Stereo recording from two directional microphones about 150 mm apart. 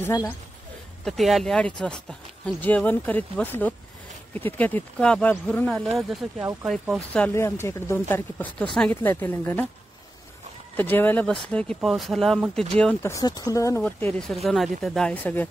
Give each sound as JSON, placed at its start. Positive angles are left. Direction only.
{"t": 0.0, "sound": "speech", "side_deg": 25}
{"t": 1.0, "sound": "speech", "side_deg": 0}
{"t": 7.2, "sound": "speech", "side_deg": 15}
{"t": 10.8, "sound": "speech", "side_deg": 15}
{"t": 13.0, "sound": "speech", "side_deg": 25}
{"t": 14.1, "sound": "speech", "side_deg": 0}